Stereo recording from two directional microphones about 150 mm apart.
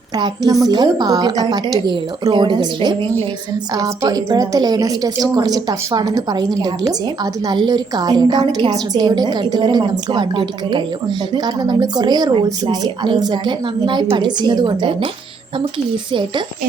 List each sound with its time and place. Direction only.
0.2 s a woman's voice: 25° right (ahead or behind)